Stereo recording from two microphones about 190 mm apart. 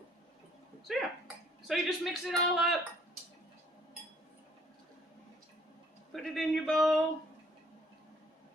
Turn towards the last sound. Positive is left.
turn(degrees=0)  # may be behind; listen again after turning